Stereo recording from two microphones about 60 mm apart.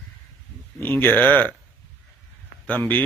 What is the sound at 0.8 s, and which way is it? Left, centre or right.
Speech, left.